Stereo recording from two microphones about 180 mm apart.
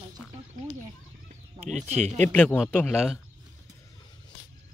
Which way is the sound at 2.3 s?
10° left (ahead or behind).